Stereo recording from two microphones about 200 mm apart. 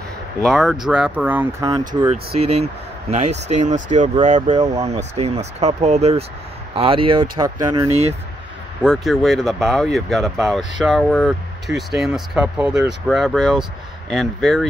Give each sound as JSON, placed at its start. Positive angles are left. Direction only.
{"t": 0.5, "sound": "speech", "side_deg": 0}
{"t": 2.4, "sound": "speech", "side_deg": -35}
{"t": 8.8, "sound": "speech", "side_deg": 0}